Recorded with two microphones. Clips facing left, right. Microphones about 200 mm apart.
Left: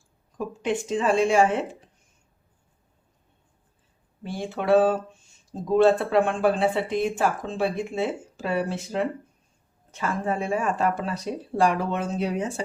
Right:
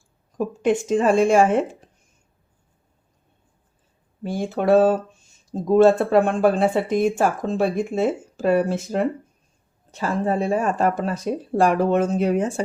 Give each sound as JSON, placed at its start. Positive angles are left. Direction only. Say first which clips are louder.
{"t": 0.3, "sound": "speech", "louder": "right 6 dB", "side_deg": -45}
{"t": 4.2, "sound": "speech", "louder": "right 6 dB", "side_deg": -45}
{"t": 9.9, "sound": "speech", "louder": "right 5 dB", "side_deg": -35}